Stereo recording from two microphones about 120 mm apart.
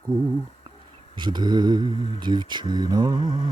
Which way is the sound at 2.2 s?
40° right (ahead or behind).